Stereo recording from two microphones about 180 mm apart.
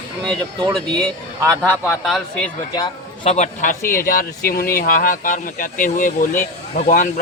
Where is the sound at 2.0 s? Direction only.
Centre (ahead or behind).